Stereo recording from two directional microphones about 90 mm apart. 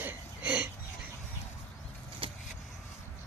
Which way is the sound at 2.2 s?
90° right.